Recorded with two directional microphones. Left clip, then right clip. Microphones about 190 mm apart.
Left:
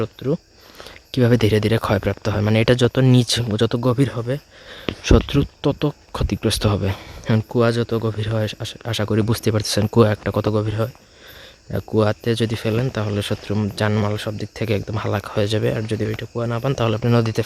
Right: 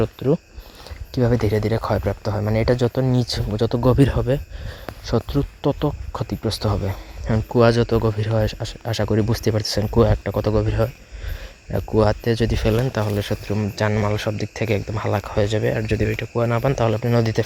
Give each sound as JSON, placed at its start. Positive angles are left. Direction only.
{"t": 0.0, "sound": "speech", "side_deg": 0}
{"t": 1.1, "sound": "speech", "side_deg": 45}
{"t": 1.8, "sound": "speech", "side_deg": 25}
{"t": 3.8, "sound": "speech", "side_deg": 0}
{"t": 5.1, "sound": "speech", "side_deg": 25}
{"t": 7.5, "sound": "speech", "side_deg": 0}
{"t": 14.1, "sound": "speech", "side_deg": 5}
{"t": 14.6, "sound": "speech", "side_deg": 15}
{"t": 16.7, "sound": "speech", "side_deg": 15}